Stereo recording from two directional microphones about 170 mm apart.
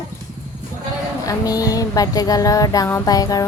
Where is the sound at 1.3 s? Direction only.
20° left (ahead or behind).